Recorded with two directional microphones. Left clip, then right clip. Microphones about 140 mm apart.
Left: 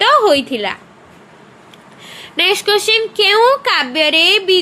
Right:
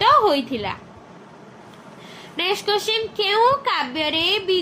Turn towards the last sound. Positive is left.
turn(degrees=50)  # may be behind; listen again after turning